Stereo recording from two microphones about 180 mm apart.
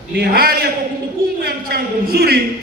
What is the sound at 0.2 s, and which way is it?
A man's voice, 55° right (ahead or behind).